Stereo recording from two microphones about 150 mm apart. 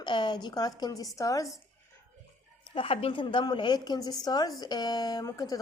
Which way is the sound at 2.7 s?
35° left (ahead or behind).